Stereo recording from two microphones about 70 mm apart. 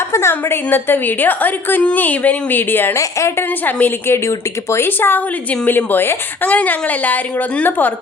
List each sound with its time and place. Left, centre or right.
0.1 s a woman's voice: left
2.9 s a woman's voice: left
3.7 s a woman's voice: left